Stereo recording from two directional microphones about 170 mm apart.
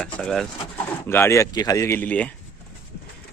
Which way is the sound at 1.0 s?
15° left (ahead or behind).